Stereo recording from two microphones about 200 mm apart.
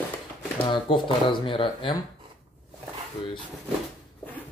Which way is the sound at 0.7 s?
25° left (ahead or behind).